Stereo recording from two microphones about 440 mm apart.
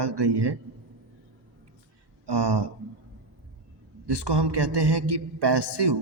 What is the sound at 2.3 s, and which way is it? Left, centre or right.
Speech, right.